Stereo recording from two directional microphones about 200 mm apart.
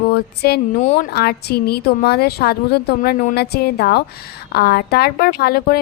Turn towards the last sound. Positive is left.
turn(degrees=50)  # may be behind; listen again after turning